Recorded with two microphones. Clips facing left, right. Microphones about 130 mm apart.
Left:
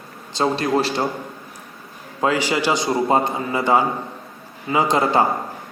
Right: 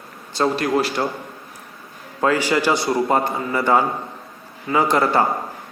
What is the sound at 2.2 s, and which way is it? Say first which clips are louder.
A man's voice: right 1 dB; 15° left (ahead or behind).